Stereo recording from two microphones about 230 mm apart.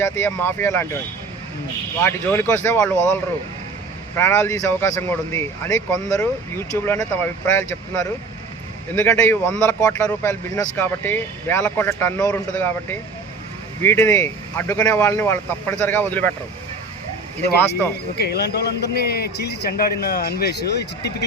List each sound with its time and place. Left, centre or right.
0.0 s speech: centre
2.0 s speech: centre
4.2 s speech: centre
18.2 s a man's voice: left